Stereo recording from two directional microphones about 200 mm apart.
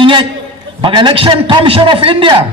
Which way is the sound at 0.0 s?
25° right (ahead or behind).